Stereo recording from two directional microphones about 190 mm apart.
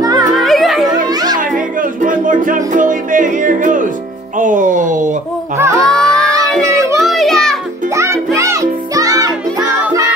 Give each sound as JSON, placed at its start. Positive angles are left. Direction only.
{"t": 0.0, "sound": "music", "side_deg": -20}
{"t": 0.4, "sound": "music", "side_deg": 0}
{"t": 1.0, "sound": "music", "side_deg": -20}
{"t": 1.4, "sound": "music", "side_deg": -45}
{"t": 5.8, "sound": "a sound", "side_deg": 5}
{"t": 7.0, "sound": "music", "side_deg": 0}
{"t": 7.9, "sound": "music", "side_deg": -15}